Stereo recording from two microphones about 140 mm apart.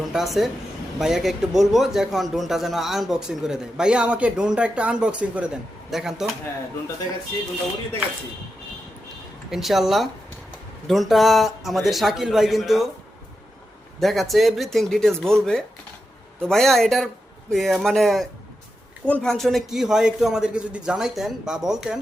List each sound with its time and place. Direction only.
0.1 s a man's voice: centre (ahead or behind)
9.5 s a man's voice: centre (ahead or behind)
14.0 s a man's voice: centre (ahead or behind)